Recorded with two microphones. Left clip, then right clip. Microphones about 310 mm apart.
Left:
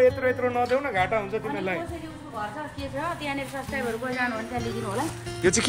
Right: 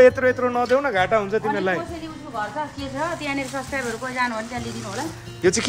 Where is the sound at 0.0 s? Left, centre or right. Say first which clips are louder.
Right 6 dB; right.